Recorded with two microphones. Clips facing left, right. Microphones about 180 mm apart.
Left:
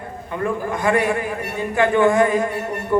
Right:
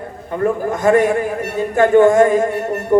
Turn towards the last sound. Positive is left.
turn(degrees=-45)  # may be behind; listen again after turning